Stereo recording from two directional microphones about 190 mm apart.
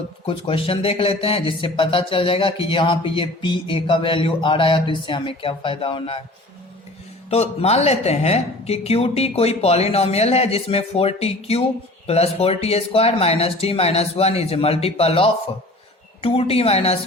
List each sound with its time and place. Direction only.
0.3 s speech: 30° left (ahead or behind)
7.3 s speech: 35° left (ahead or behind)